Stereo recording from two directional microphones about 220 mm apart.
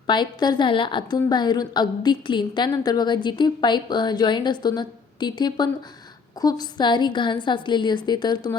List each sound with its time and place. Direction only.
0.1 s a woman's voice: 20° left (ahead or behind)